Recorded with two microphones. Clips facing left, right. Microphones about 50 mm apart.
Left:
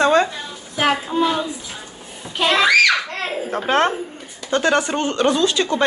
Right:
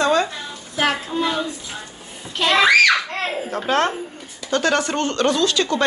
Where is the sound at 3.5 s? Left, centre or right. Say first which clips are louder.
Left 3 dB; left.